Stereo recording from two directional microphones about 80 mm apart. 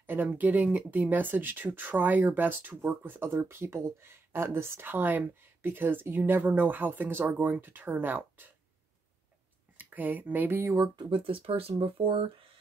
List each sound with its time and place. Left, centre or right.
0.0 s a sound: right
0.3 s speech: right
9.8 s speech: right
11.0 s speech: right